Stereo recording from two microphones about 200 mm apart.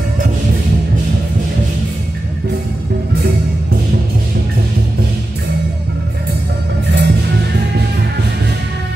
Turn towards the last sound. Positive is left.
turn(degrees=-60)  # may be behind; listen again after turning